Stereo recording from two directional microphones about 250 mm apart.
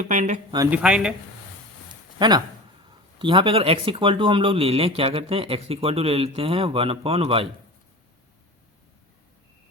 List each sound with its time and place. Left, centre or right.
0.0 s speech: right
0.5 s speech: centre
2.1 s speech: centre